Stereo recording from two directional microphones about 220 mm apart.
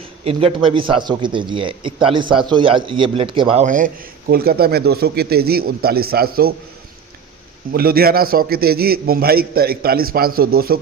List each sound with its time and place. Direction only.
0.3 s speech: 25° right (ahead or behind); by 6.5 s 45° right (ahead or behind)
7.7 s a man's voice: 45° right (ahead or behind)